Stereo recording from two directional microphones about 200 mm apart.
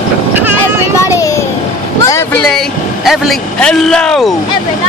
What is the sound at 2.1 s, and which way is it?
Vehicle, 15° left (ahead or behind).